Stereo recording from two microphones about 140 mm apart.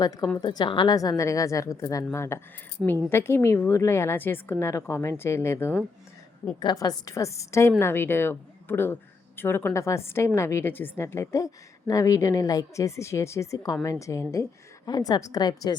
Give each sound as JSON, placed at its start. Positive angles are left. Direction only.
{"t": 0.0, "sound": "a woman's voice", "side_deg": 25}
{"t": 6.6, "sound": "speech", "side_deg": 30}